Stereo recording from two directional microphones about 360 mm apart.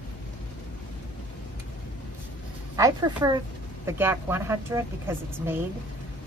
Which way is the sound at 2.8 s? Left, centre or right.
Centre.